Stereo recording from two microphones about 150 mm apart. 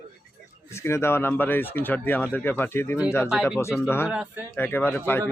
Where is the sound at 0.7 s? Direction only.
20° left (ahead or behind).